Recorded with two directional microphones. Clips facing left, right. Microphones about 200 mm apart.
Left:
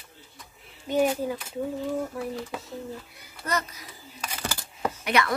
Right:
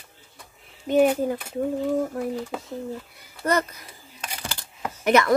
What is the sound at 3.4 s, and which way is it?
Speech, 55° right (ahead or behind).